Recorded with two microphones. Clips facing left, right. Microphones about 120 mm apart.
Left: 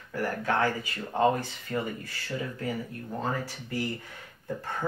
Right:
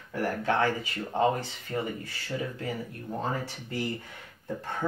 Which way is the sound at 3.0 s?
20° right (ahead or behind).